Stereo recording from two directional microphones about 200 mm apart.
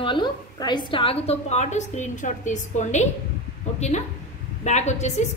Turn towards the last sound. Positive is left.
turn(degrees=35)  # may be behind; listen again after turning